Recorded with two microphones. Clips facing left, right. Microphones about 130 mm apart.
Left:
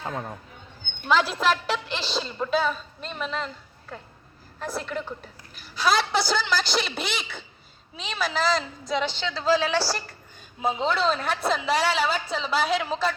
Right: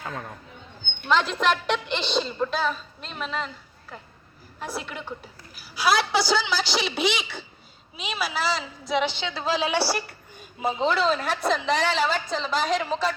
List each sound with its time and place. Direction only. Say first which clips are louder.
0.0 s speech: left 3 dB; 25° left (ahead or behind)
1.0 s a woman's voice: even; 5° left (ahead or behind)
4.6 s a woman's voice: left 3 dB; 5° right (ahead or behind)
10.6 s a woman's voice: right 1 dB; centre (ahead or behind)